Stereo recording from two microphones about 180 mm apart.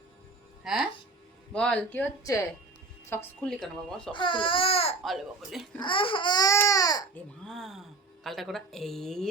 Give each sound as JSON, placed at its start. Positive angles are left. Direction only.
{"t": 0.6, "sound": "speech", "side_deg": 0}
{"t": 4.1, "sound": "baby cry", "side_deg": 25}
{"t": 5.0, "sound": "speech", "side_deg": 0}
{"t": 5.8, "sound": "baby cry", "side_deg": 30}
{"t": 7.1, "sound": "speech", "side_deg": 5}